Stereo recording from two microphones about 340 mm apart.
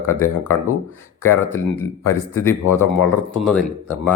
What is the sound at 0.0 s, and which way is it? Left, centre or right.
Speech, centre.